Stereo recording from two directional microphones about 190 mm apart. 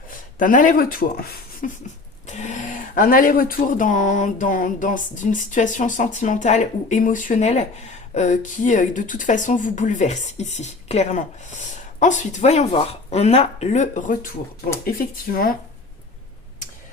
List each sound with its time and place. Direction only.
0.3 s speech: 45° left (ahead or behind)
2.2 s speech: 40° left (ahead or behind)